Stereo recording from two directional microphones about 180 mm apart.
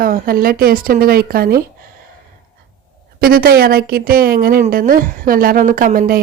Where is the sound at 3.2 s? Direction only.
55° right (ahead or behind).